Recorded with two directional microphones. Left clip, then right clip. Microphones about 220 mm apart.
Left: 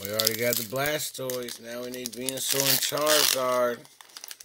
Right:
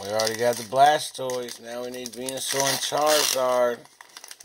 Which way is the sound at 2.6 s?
15° left (ahead or behind).